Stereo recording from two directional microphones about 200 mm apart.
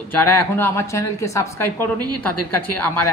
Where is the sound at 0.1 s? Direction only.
10° left (ahead or behind).